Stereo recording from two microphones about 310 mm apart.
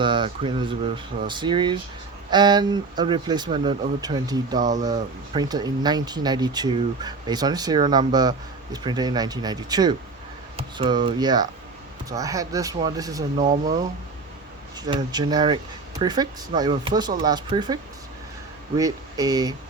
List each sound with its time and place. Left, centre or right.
0.0 s speech: centre
13.4 s speech: right
14.8 s speech: centre
18.8 s speech: centre